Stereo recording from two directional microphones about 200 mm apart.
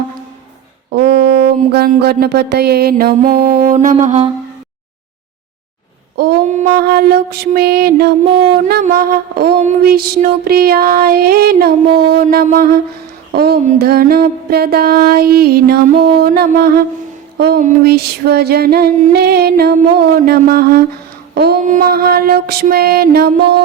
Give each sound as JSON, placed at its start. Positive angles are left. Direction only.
{"t": 0.9, "sound": "a sound", "side_deg": -55}
{"t": 6.5, "sound": "music", "side_deg": -45}
{"t": 17.3, "sound": "speech", "side_deg": -55}
{"t": 17.6, "sound": "music", "side_deg": -50}